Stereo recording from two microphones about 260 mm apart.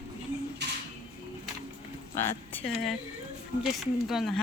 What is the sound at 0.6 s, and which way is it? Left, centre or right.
Music, right.